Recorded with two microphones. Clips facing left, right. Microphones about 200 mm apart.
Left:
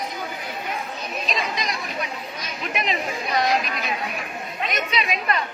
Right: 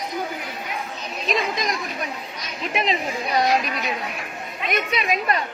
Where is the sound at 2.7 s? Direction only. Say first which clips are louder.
Right 3 dB; 30° right (ahead or behind).